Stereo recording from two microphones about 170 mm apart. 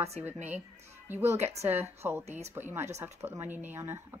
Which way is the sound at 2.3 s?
40° right (ahead or behind).